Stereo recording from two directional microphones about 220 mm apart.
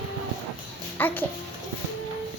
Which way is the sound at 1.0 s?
10° left (ahead or behind).